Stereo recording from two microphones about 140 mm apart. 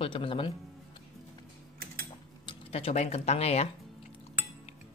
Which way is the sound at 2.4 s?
45° left (ahead or behind).